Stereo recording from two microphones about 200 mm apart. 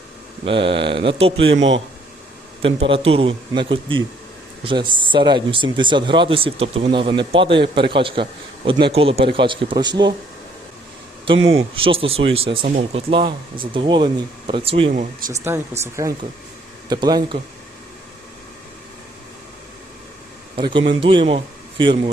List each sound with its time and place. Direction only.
0.4 s speech: 25° right (ahead or behind)
2.6 s speech: 25° right (ahead or behind)
11.5 s speech: 25° right (ahead or behind)
15.8 s speech: 15° right (ahead or behind)
20.6 s speech: 25° right (ahead or behind)